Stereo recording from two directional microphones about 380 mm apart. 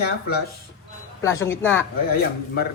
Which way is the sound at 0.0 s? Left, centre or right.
Left.